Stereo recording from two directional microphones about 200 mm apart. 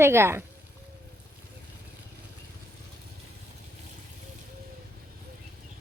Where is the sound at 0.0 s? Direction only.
10° right (ahead or behind).